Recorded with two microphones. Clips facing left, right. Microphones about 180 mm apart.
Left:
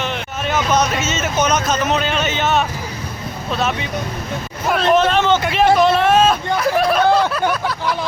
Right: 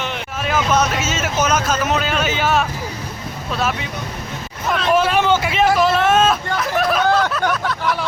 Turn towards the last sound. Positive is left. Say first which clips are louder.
# left 1 dB
turn(degrees=5)  # may be behind; listen again after turning